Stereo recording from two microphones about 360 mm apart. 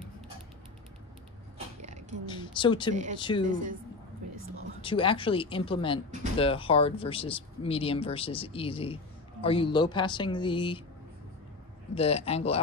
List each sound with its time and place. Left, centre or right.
1.8 s a sound: centre
2.2 s speech: centre
2.9 s speech: centre
3.2 s speech: centre
3.4 s speech: right
4.8 s speech: centre
11.9 s speech: centre